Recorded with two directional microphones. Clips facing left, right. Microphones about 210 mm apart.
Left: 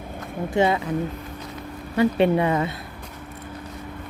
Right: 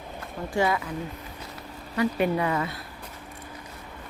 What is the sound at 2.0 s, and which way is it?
Speech, 25° left (ahead or behind).